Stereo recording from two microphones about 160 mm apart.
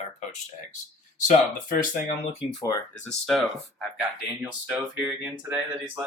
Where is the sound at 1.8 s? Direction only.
55° left (ahead or behind).